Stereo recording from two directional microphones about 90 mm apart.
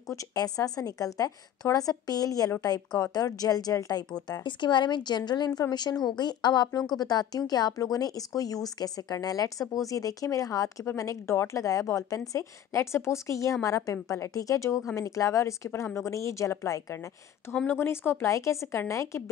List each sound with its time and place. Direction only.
0.1 s speech: 40° left (ahead or behind)
17.6 s speech: 25° left (ahead or behind)